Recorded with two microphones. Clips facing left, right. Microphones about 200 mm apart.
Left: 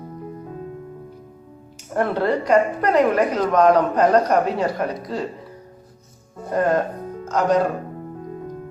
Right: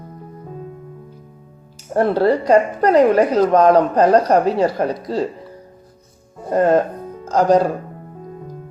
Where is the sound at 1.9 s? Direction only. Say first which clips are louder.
Right 5 dB; 35° right (ahead or behind).